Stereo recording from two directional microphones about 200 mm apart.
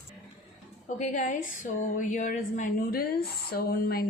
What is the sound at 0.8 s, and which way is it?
A woman's voice, 35° left (ahead or behind).